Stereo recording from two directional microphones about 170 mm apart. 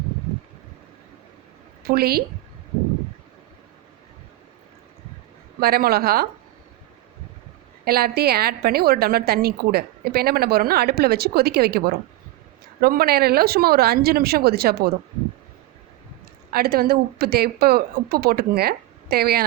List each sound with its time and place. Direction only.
1.8 s a woman's voice: 65° right (ahead or behind)
5.5 s a woman's voice: 65° right (ahead or behind)
7.9 s a woman's voice: 65° right (ahead or behind)
16.5 s a woman's voice: 60° right (ahead or behind)